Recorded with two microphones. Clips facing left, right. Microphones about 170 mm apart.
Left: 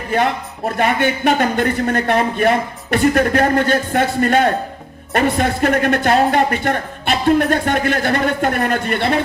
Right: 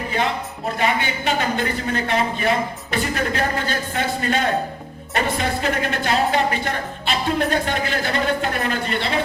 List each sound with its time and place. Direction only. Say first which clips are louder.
0.8 s a woman's voice: left 6 dB; 55° left (ahead or behind)